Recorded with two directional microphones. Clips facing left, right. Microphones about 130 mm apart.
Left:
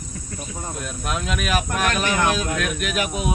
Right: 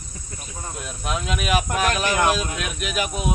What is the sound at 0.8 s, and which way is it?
Speech, centre (ahead or behind).